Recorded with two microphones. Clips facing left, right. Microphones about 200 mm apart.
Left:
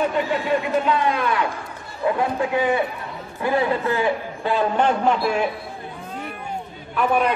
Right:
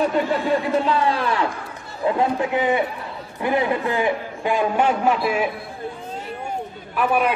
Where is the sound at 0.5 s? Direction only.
35° right (ahead or behind).